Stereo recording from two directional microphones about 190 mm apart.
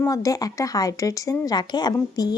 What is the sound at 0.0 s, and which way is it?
A woman's voice, 15° left (ahead or behind).